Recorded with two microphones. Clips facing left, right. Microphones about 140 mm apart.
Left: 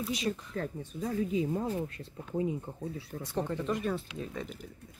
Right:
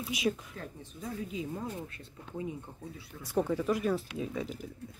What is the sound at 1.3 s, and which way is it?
Speech, 35° left (ahead or behind).